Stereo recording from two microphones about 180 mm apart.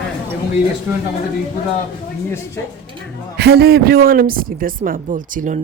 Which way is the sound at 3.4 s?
65° right (ahead or behind).